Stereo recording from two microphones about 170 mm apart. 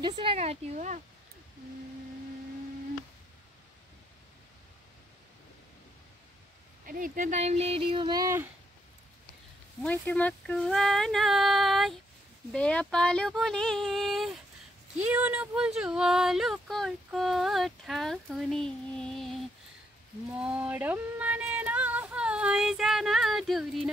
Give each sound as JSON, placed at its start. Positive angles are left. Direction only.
{"t": 0.1, "sound": "speech", "side_deg": -35}
{"t": 6.9, "sound": "speech", "side_deg": -50}
{"t": 9.8, "sound": "speech", "side_deg": 10}
{"t": 20.3, "sound": "a sound", "side_deg": -5}